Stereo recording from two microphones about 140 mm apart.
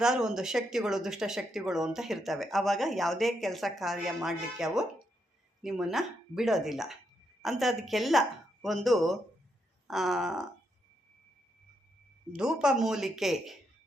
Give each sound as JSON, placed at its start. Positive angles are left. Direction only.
{"t": 0.0, "sound": "speech", "side_deg": -5}
{"t": 9.8, "sound": "a sound", "side_deg": 0}
{"t": 12.3, "sound": "speech", "side_deg": -5}